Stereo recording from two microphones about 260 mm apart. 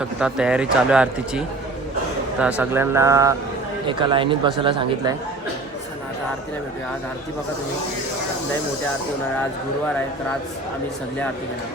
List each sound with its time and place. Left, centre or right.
0.2 s a man's voice: centre